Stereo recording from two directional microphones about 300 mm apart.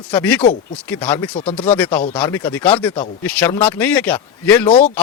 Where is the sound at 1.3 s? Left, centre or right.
Centre.